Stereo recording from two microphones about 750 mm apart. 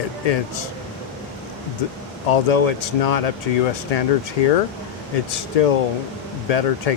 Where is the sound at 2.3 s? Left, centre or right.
Left.